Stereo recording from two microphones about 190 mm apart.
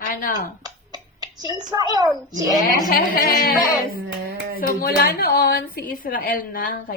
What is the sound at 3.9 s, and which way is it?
Music, 55° right (ahead or behind).